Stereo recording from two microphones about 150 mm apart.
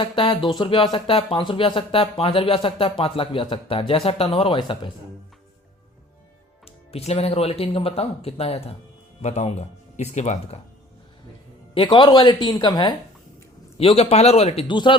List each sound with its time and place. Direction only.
0.0 s speech: 35° left (ahead or behind)
6.9 s speech: 45° left (ahead or behind)
11.7 s speech: 35° left (ahead or behind)
13.7 s speech: 40° left (ahead or behind)
14.7 s speech: 30° left (ahead or behind)